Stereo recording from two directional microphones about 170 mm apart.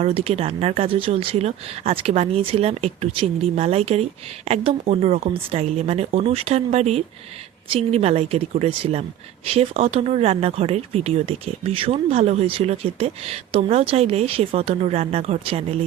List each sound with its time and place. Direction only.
0.0 s speech: 35° right (ahead or behind)